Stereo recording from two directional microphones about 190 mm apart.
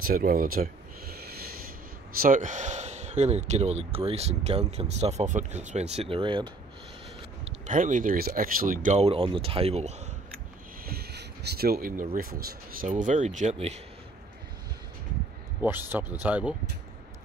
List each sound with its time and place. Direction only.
0.0 s speech: 50° right (ahead or behind)
2.1 s speech: 45° right (ahead or behind)
10.9 s speech: 55° right (ahead or behind); by 13.7 s 35° right (ahead or behind)
15.6 s speech: 10° right (ahead or behind)